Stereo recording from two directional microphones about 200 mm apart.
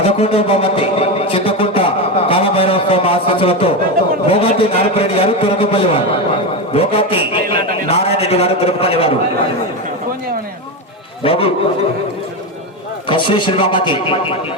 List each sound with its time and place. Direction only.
0.0 s a sound: 30° left (ahead or behind)
4.3 s a man's voice: 30° left (ahead or behind)
11.2 s a man's voice: 30° left (ahead or behind)
13.1 s a man's voice: 25° left (ahead or behind)